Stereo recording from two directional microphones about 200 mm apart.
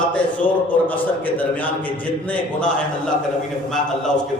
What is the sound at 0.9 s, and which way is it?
A man's voice, 10° left (ahead or behind).